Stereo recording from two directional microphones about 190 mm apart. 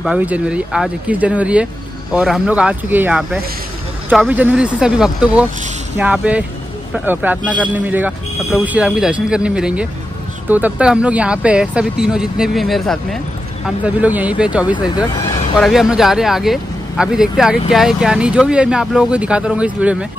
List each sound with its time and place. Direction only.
0.0 s speech: 5° right (ahead or behind)
15.0 s a sound: 25° left (ahead or behind)
15.6 s speech: centre (ahead or behind)